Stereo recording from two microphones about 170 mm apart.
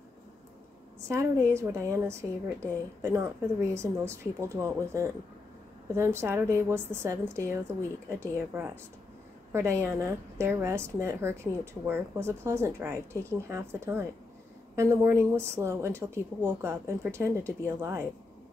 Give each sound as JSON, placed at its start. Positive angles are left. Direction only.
{"t": 1.0, "sound": "a woman's voice", "side_deg": -15}